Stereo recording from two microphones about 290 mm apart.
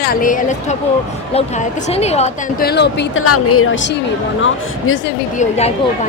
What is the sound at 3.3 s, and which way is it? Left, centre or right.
Speech, left.